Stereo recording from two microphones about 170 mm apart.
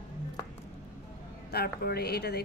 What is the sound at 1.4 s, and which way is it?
Speech, 70° left (ahead or behind).